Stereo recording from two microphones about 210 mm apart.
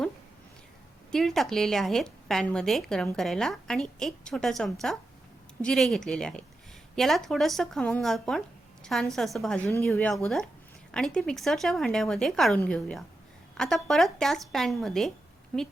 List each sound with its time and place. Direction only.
1.1 s speech: centre (ahead or behind)
9.6 s speech: 15° left (ahead or behind)